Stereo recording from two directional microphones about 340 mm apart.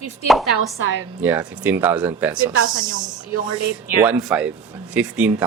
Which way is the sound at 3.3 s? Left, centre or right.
Left.